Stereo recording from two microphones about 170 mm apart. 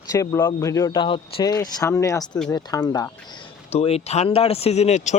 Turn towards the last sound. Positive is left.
turn(degrees=45)  # may be behind; listen again after turning